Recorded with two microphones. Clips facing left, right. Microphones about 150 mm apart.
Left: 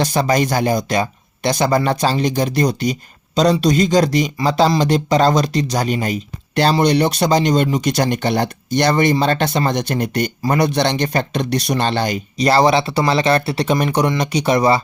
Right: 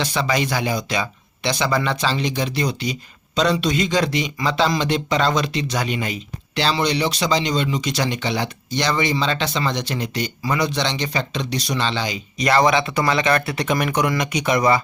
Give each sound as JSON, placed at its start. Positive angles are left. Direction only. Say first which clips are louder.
{"t": 0.0, "sound": "speech", "louder": "left 5 dB", "side_deg": 45}
{"t": 12.4, "sound": "speech", "louder": "left 3 dB", "side_deg": 35}